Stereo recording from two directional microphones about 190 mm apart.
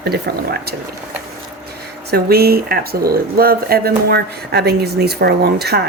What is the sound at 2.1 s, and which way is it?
Speech, 55° right (ahead or behind).